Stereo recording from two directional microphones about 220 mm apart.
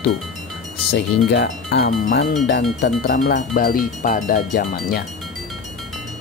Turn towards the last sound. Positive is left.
turn(degrees=40)  # may be behind; listen again after turning